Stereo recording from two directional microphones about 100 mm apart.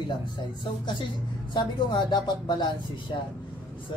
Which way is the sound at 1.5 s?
50° left (ahead or behind).